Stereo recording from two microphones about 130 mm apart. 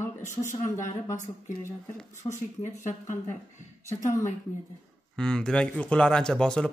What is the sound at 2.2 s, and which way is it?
Speech, 30° left (ahead or behind).